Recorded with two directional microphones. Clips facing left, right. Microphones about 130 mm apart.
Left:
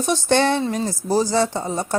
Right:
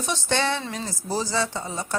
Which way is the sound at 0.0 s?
50° left (ahead or behind).